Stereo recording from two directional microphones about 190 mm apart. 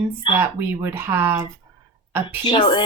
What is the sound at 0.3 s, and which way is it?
Speech, 10° right (ahead or behind).